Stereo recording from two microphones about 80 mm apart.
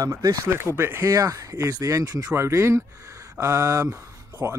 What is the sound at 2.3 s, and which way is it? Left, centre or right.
Speech, right.